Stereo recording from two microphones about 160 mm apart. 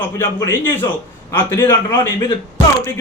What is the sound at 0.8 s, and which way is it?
Speech, 30° left (ahead or behind).